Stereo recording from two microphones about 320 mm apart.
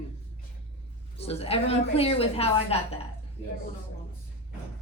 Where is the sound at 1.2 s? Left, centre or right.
Centre.